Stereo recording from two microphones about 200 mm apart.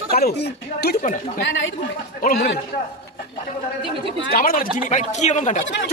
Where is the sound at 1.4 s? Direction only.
65° left (ahead or behind).